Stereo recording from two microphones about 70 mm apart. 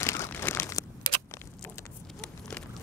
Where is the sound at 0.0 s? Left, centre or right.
Left.